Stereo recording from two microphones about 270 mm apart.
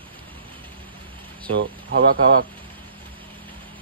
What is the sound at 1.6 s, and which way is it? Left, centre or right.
Speech, right.